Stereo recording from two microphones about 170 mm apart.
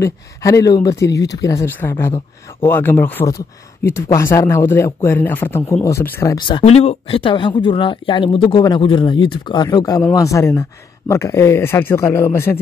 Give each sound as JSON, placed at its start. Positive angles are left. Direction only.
{"t": 0.0, "sound": "speech", "side_deg": 20}
{"t": 6.3, "sound": "speech", "side_deg": 30}